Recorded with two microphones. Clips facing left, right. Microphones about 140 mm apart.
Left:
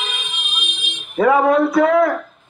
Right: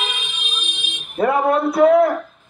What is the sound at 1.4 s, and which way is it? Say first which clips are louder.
Speech: even; 90° left.